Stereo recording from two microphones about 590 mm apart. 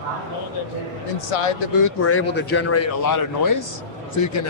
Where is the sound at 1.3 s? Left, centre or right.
Left.